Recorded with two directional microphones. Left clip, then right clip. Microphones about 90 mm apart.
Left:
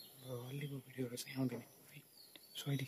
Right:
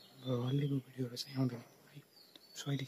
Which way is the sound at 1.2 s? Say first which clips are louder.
Right 3 dB; 30° right (ahead or behind).